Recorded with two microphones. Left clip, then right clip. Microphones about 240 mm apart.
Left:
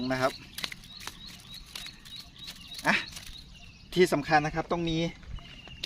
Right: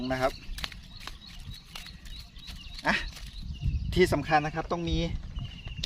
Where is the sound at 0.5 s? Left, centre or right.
Centre.